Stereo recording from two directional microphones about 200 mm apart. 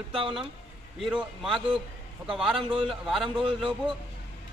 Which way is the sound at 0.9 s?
Centre (ahead or behind).